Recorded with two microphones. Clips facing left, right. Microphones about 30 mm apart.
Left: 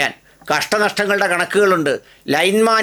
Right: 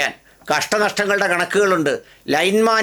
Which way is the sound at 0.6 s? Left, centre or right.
Left.